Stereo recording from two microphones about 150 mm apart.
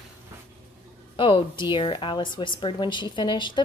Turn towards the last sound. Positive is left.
turn(degrees=30)  # may be behind; listen again after turning